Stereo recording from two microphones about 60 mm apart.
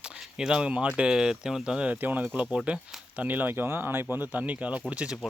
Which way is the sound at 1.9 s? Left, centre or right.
Right.